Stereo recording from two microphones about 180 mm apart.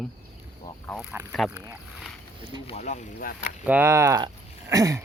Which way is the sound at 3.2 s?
50° left (ahead or behind).